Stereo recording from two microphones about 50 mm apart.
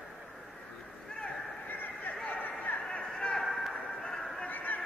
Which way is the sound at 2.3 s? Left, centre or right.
Left.